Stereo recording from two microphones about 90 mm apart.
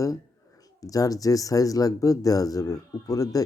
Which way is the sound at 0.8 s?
40° left (ahead or behind).